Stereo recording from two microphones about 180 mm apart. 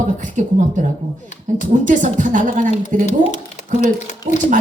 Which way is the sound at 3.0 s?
40° left (ahead or behind).